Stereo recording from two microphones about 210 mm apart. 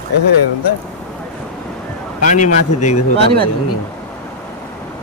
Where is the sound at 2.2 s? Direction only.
35° left (ahead or behind).